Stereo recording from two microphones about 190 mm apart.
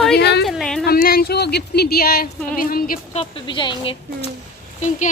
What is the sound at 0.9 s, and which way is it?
Speech, 50° left (ahead or behind).